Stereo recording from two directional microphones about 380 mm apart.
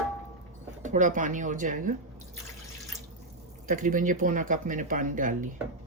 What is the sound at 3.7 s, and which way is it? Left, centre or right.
Speech, right.